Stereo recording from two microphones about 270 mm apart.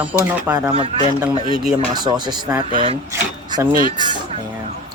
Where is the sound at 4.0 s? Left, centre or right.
Centre.